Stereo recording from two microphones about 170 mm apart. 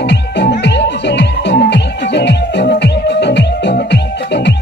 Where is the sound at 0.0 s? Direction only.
90° left.